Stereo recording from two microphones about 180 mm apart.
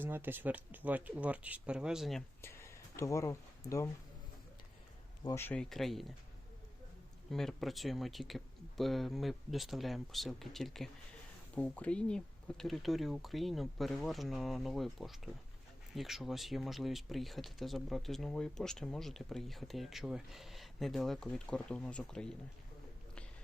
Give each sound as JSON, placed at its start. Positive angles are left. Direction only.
{"t": 0.0, "sound": "speech", "side_deg": -10}
{"t": 2.4, "sound": "a sound", "side_deg": 15}
{"t": 5.2, "sound": "speech", "side_deg": 15}
{"t": 7.3, "sound": "speech", "side_deg": 0}